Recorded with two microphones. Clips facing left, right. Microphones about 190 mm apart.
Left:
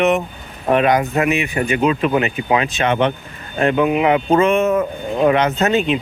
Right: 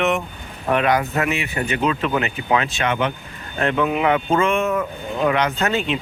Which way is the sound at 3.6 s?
15° left (ahead or behind).